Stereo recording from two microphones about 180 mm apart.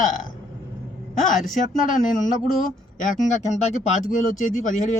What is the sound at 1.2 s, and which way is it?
Speech, 45° left (ahead or behind).